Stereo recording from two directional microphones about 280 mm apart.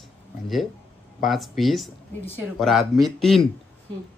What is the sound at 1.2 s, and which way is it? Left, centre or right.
Speech, centre.